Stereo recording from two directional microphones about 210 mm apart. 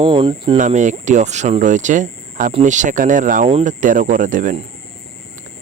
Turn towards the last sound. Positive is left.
turn(degrees=-40)  # may be behind; listen again after turning